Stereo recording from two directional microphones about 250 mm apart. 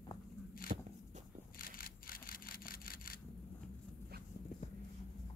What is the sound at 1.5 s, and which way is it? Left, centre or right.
Single-lens reflex camera, left.